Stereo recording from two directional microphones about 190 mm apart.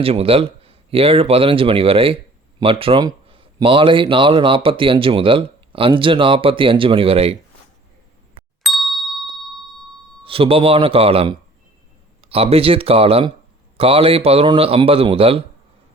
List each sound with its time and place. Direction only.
0.0 s speech: 30° right (ahead or behind)
8.6 s ding: centre (ahead or behind)
10.2 s speech: 30° right (ahead or behind)